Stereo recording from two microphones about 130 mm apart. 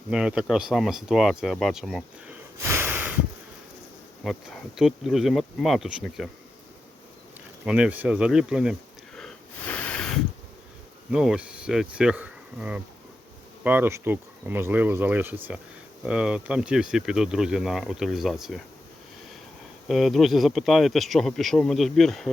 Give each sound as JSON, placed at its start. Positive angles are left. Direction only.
{"t": 0.1, "sound": "speech", "side_deg": -5}
{"t": 2.6, "sound": "a sound", "side_deg": -20}
{"t": 4.2, "sound": "speech", "side_deg": 0}
{"t": 7.6, "sound": "speech", "side_deg": -10}
{"t": 9.1, "sound": "a sound", "side_deg": 10}
{"t": 11.1, "sound": "speech", "side_deg": -5}
{"t": 19.9, "sound": "speech", "side_deg": 0}